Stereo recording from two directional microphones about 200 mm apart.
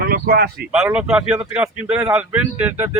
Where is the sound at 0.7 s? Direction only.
5° right (ahead or behind).